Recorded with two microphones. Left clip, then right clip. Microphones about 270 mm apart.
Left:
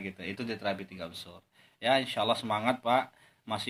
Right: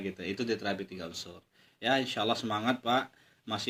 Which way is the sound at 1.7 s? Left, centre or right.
Left.